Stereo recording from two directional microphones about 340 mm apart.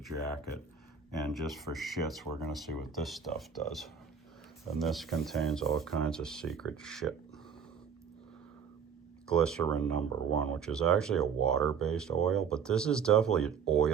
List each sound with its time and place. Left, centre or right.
0.1 s speech: right
1.3 s speech: centre
9.2 s speech: centre